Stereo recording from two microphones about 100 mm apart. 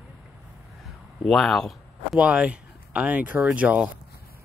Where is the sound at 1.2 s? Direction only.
5° left (ahead or behind).